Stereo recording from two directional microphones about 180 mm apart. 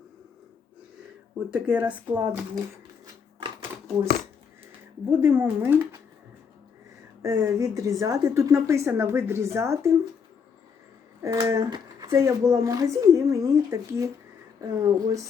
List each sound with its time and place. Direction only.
1.5 s speech: 5° right (ahead or behind)
5.0 s speech: 10° right (ahead or behind)
7.2 s speech: 15° right (ahead or behind)
11.2 s speech: 15° right (ahead or behind)